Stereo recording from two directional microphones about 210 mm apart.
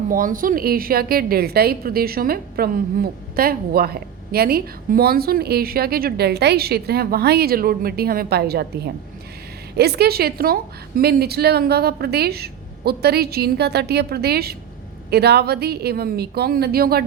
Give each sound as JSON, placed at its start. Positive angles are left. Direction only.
{"t": 0.1, "sound": "a woman's voice", "side_deg": -40}